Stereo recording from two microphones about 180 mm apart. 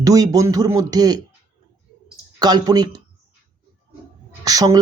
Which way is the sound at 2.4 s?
20° right (ahead or behind).